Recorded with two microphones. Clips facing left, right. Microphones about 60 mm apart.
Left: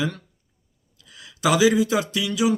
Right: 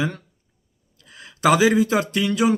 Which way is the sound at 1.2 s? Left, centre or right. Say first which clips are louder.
Right 2 dB; right.